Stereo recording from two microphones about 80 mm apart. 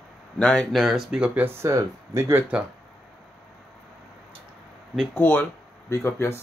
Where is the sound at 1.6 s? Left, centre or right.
Right.